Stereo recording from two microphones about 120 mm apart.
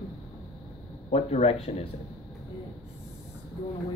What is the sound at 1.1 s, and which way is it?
Speech, 65° left (ahead or behind).